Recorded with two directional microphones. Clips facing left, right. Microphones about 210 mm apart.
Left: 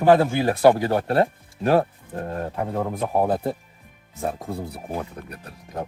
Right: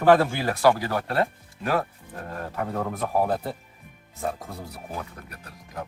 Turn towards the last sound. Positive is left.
turn(degrees=30)  # may be behind; listen again after turning